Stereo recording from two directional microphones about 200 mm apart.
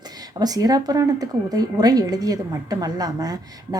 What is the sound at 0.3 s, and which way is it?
A woman's voice, 20° right (ahead or behind).